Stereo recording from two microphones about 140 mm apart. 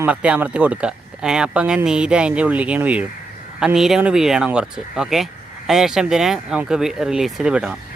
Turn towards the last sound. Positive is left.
turn(degrees=-5)  # may be behind; listen again after turning